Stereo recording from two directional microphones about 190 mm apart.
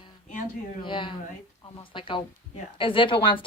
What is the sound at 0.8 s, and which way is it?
A woman's voice, 25° left (ahead or behind).